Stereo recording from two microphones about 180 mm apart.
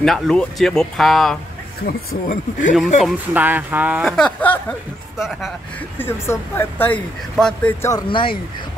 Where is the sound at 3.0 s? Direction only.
10° right (ahead or behind).